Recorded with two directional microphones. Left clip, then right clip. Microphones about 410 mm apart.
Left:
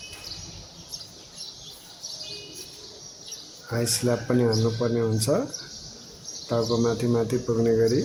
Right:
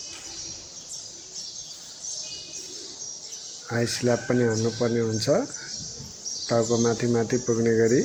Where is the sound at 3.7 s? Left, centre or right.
Left.